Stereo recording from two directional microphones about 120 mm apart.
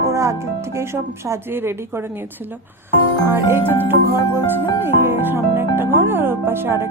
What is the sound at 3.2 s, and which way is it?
Speech, 20° right (ahead or behind).